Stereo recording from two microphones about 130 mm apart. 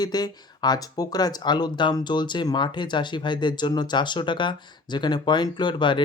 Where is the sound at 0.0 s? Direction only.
30° left (ahead or behind).